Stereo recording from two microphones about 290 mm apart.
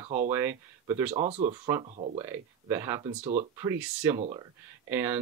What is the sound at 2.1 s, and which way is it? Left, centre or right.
Speech, centre.